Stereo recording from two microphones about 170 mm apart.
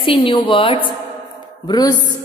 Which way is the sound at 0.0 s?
30° left (ahead or behind).